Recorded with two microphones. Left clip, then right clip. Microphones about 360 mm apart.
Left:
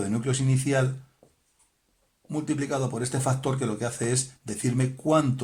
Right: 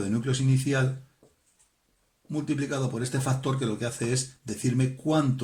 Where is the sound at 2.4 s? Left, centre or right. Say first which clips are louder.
Left 2 dB; centre.